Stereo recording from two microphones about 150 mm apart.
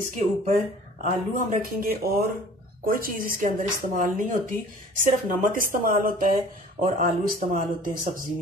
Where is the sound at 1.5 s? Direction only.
80° right.